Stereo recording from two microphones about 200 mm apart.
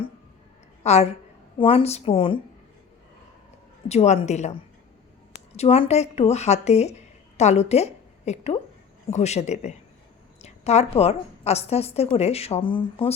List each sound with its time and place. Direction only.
0.9 s a woman's voice: 30° left (ahead or behind)
3.8 s a woman's voice: 35° left (ahead or behind)
5.5 s a woman's voice: 30° left (ahead or behind)